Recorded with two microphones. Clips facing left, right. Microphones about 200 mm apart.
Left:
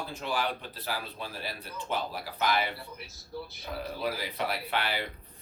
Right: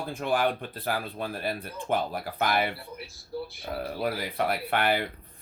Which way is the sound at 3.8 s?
55° right (ahead or behind).